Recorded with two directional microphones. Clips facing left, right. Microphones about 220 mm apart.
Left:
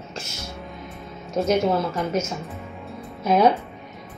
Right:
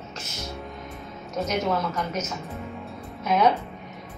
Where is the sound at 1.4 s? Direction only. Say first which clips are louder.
Left 5 dB; 30° left (ahead or behind).